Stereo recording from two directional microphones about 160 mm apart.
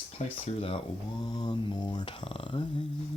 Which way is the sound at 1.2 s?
25° left (ahead or behind).